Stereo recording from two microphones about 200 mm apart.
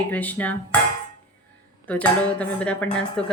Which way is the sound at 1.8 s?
5° left (ahead or behind).